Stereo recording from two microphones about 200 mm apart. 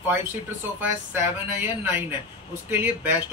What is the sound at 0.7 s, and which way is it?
Speech, 10° right (ahead or behind).